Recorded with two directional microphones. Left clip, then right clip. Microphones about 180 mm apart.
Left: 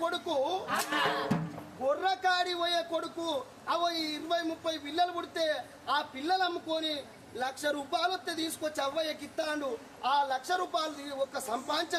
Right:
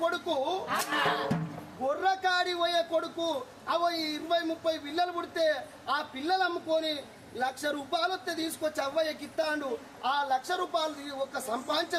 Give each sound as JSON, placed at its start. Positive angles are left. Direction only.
{"t": 0.0, "sound": "a sound", "side_deg": 0}
{"t": 1.0, "sound": "music", "side_deg": 10}
{"t": 1.8, "sound": "a man's voice", "side_deg": 0}